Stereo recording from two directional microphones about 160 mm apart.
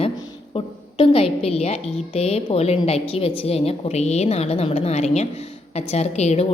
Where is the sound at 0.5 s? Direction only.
35° left (ahead or behind).